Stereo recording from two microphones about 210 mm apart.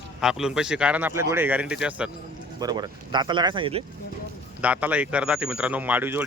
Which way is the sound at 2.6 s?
20° right (ahead or behind).